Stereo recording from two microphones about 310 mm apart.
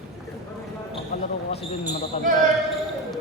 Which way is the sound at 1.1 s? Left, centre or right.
Left.